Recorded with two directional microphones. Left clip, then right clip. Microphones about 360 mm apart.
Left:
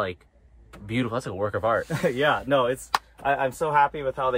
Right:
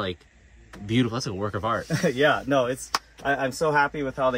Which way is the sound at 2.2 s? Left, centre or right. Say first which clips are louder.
Right 1 dB; centre.